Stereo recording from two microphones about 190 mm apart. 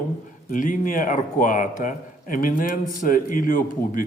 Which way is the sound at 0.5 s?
45° left (ahead or behind).